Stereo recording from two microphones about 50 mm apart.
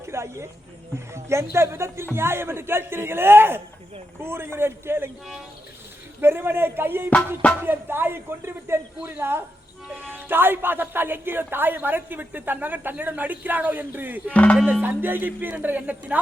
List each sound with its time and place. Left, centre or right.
0.0 s a sound: right
0.9 s speech: right
6.1 s speech: right